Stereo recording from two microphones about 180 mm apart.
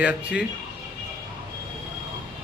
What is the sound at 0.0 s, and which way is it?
Speech, 5° right (ahead or behind).